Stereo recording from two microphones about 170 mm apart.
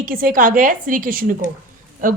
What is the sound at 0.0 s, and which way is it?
A woman's voice, 55° right (ahead or behind).